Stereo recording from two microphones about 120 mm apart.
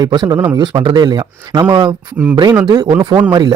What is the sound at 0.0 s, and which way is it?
A man's voice, 35° right (ahead or behind).